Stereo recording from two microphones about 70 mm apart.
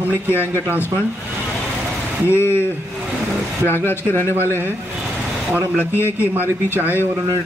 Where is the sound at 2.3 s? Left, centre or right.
Left.